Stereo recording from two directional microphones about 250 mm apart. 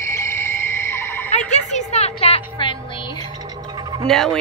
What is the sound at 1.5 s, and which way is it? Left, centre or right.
Music, left.